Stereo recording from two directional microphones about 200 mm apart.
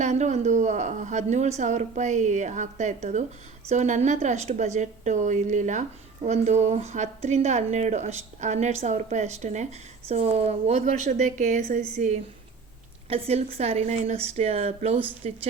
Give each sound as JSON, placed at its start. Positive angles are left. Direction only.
{"t": 0.0, "sound": "a woman's voice", "side_deg": -35}